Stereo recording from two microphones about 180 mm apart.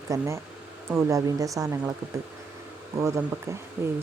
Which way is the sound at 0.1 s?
15° right (ahead or behind).